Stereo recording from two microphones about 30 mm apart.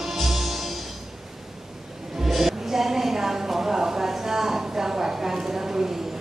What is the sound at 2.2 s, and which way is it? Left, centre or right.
Music, centre.